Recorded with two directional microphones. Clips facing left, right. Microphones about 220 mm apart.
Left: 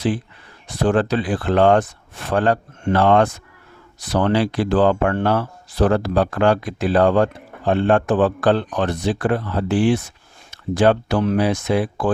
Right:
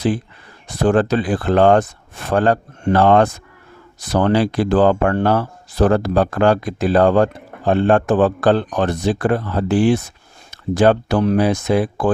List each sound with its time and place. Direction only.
0.7 s speech: 45° right (ahead or behind)